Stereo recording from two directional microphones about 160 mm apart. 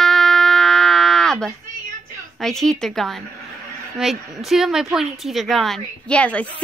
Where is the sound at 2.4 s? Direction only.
5° left (ahead or behind).